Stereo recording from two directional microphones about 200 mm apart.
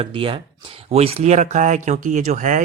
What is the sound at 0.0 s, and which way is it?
Speech, 25° right (ahead or behind).